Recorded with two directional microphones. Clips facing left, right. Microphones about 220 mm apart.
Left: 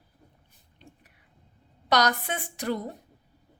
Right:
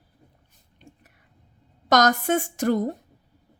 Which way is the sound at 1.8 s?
45° right (ahead or behind).